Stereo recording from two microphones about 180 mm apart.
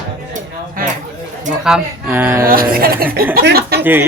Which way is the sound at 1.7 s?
5° right (ahead or behind).